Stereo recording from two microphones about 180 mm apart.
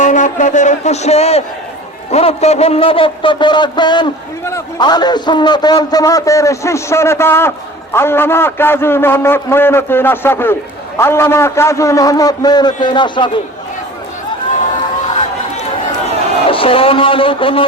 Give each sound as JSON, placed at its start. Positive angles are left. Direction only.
{"t": 0.0, "sound": "a man's voice", "side_deg": 45}
{"t": 16.5, "sound": "a man's voice", "side_deg": 30}